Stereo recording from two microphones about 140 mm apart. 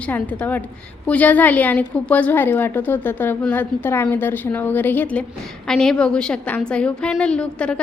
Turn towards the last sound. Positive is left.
turn(degrees=5)  # may be behind; listen again after turning